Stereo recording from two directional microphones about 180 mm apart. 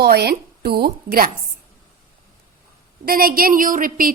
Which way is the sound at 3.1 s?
55° right (ahead or behind).